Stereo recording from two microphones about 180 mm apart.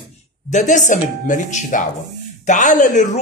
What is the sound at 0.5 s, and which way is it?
A man's voice, 45° left (ahead or behind).